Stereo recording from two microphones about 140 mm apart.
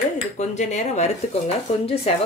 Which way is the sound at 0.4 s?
55° left (ahead or behind).